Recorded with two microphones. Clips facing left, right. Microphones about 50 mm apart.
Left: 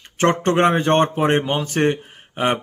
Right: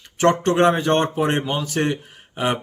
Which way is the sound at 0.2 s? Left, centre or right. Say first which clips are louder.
Even; left.